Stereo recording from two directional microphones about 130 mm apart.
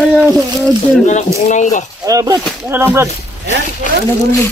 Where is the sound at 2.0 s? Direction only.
25° right (ahead or behind).